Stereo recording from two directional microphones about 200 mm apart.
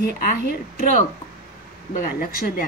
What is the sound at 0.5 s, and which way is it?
Speech, 50° left (ahead or behind).